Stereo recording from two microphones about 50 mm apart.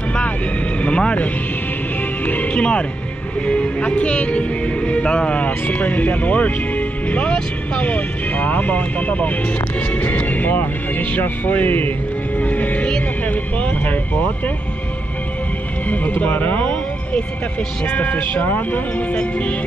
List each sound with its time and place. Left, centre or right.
0.7 s vehicle: left
2.2 s music: left
3.4 s speech: left
12.4 s music: left
13.2 s a sound: left
16.2 s speech: left
17.8 s speech: left